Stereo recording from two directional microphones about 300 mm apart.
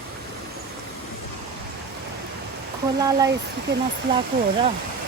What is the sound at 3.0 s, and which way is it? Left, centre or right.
Speech, centre.